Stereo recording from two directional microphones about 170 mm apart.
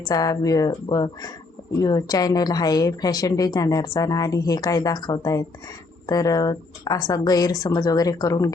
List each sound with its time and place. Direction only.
0.1 s a woman's voice: 20° left (ahead or behind)